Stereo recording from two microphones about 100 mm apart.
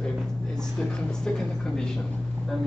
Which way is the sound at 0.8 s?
5° left (ahead or behind).